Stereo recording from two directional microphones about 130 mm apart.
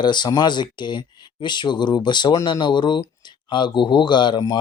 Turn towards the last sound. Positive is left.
turn(degrees=35)  # may be behind; listen again after turning